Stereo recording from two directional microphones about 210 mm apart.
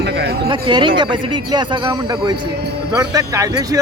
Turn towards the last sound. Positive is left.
turn(degrees=-15)  # may be behind; listen again after turning